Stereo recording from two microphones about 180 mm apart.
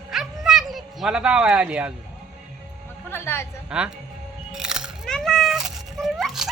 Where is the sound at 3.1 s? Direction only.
15° left (ahead or behind).